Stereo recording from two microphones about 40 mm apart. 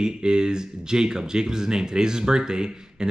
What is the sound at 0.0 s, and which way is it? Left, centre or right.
Speech, right.